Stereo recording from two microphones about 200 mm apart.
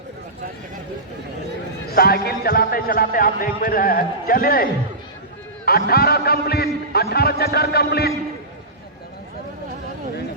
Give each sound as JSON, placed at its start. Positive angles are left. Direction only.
{"t": 1.9, "sound": "speech", "side_deg": 50}